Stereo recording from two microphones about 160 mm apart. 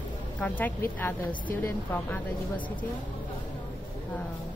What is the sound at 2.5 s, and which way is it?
Speech, 30° left (ahead or behind).